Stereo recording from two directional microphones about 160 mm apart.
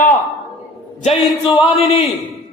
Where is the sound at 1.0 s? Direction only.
45° left (ahead or behind).